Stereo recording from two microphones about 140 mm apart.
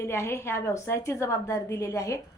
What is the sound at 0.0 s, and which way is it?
A woman's voice, 20° left (ahead or behind).